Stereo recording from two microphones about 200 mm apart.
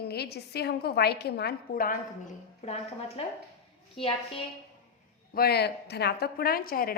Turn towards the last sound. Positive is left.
turn(degrees=50)  # may be behind; listen again after turning